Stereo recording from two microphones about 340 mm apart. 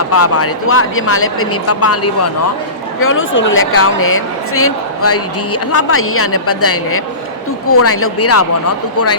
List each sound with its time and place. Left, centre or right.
0.1 s speech: left